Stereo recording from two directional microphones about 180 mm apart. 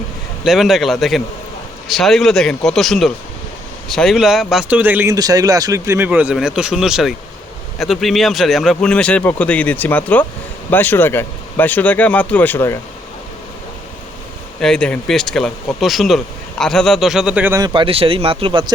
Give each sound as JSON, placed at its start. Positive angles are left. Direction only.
{"t": 0.4, "sound": "speech", "side_deg": 0}
{"t": 5.1, "sound": "speech", "side_deg": -20}
{"t": 14.6, "sound": "speech", "side_deg": 5}
{"t": 17.6, "sound": "speech", "side_deg": -25}